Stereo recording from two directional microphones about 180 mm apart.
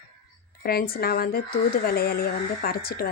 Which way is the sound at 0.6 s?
55° left (ahead or behind).